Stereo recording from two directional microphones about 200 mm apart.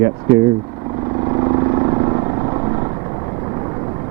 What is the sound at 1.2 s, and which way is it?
Vehicle, 25° right (ahead or behind).